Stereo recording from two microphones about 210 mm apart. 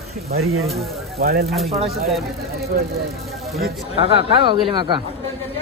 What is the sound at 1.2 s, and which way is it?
Speech, 45° right (ahead or behind).